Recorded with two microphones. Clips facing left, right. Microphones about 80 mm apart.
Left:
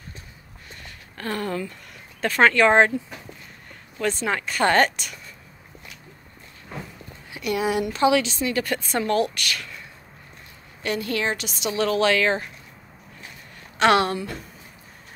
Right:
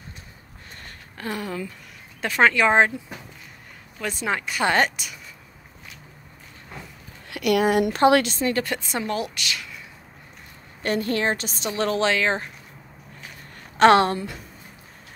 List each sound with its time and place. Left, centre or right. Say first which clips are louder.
1.1 s speech: left 2 dB; centre
4.0 s speech: left 2 dB; centre
7.2 s a woman's voice: right 4 dB; right
8.4 s a woman's voice: right 1 dB; right
8.6 s a woman's voice: left 3 dB; right
10.8 s a woman's voice: right 2 dB; right
13.7 s a woman's voice: right 3 dB; right